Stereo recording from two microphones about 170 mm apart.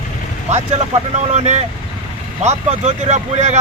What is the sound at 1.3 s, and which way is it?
Speech, 40° right (ahead or behind).